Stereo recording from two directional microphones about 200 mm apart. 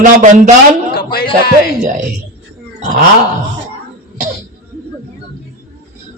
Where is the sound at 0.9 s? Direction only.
50° left (ahead or behind).